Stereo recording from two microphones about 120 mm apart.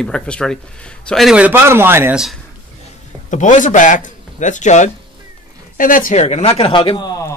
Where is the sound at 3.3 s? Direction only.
90° left.